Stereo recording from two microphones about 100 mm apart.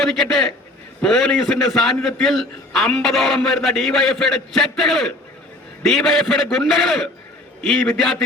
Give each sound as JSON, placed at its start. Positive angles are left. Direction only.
{"t": 0.0, "sound": "a man's voice", "side_deg": 0}